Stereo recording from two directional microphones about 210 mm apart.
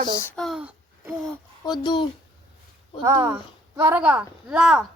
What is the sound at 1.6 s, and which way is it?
Speech, 20° left (ahead or behind).